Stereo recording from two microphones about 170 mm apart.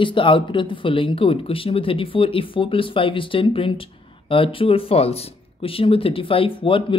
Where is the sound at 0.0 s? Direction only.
30° left (ahead or behind).